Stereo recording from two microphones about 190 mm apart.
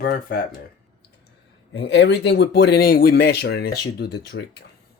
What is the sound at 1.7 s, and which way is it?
Speech, 65° left (ahead or behind).